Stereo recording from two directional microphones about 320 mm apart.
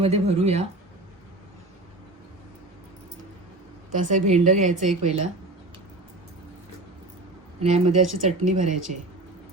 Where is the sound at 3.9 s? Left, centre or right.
Right.